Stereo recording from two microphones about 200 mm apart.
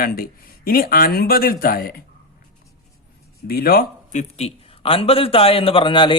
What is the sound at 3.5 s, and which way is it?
A man's voice, 50° left (ahead or behind).